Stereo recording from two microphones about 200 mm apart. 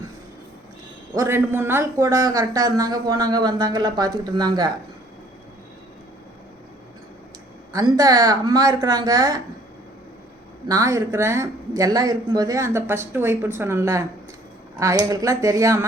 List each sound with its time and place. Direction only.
1.1 s speech: 15° right (ahead or behind)
7.7 s speech: 20° right (ahead or behind)
10.7 s speech: 15° right (ahead or behind)